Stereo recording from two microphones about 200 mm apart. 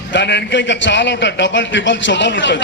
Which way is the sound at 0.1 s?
60° left (ahead or behind).